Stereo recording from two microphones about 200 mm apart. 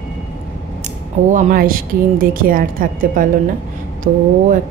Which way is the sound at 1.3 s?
45° right (ahead or behind).